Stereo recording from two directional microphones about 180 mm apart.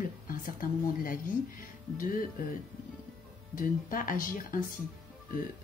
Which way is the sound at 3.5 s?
50° left (ahead or behind).